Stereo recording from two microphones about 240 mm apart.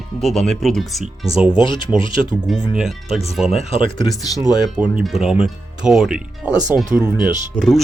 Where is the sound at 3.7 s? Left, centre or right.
Centre.